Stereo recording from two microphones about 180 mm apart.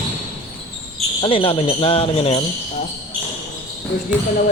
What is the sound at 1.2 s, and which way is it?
Speech, 30° left (ahead or behind).